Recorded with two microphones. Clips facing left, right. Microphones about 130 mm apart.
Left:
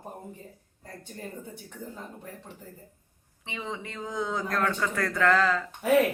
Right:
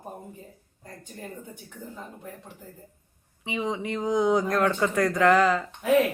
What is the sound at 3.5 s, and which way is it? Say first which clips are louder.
Speech: right 8 dB; 15° right (ahead or behind).